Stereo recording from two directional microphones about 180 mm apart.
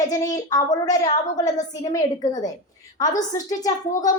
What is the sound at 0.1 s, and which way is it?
Speech, 20° left (ahead or behind).